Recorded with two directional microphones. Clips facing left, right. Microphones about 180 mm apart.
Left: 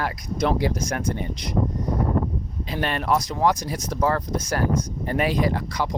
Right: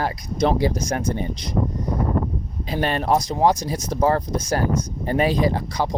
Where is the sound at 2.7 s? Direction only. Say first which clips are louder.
Right 3 dB; 35° right (ahead or behind).